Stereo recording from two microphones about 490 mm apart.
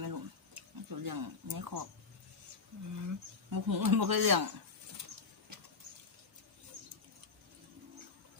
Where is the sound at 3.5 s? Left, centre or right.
Right.